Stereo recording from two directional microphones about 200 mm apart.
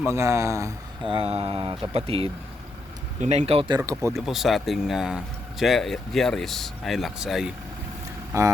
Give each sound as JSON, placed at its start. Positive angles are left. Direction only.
{"t": 0.1, "sound": "speech", "side_deg": -15}
{"t": 1.1, "sound": "speech", "side_deg": -30}
{"t": 4.1, "sound": "speech", "side_deg": 0}
{"t": 8.3, "sound": "speech", "side_deg": -15}